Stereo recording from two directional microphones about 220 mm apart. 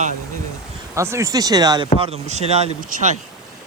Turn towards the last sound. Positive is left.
turn(degrees=-35)  # may be behind; listen again after turning